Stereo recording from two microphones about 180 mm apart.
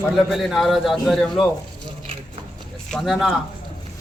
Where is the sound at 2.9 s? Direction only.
Centre (ahead or behind).